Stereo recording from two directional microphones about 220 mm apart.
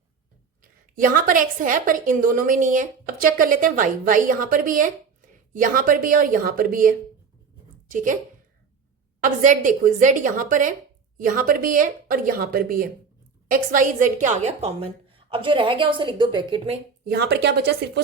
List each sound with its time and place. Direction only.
0.6 s a woman's voice: 40° right (ahead or behind)
9.2 s a woman's voice: 35° right (ahead or behind)
17.1 s a woman's voice: 45° right (ahead or behind)